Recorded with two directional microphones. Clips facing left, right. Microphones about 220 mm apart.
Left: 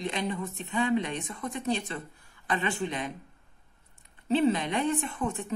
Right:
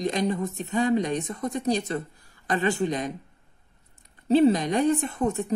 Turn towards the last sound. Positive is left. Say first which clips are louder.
# right 6 dB
turn(degrees=-40)  # may be behind; listen again after turning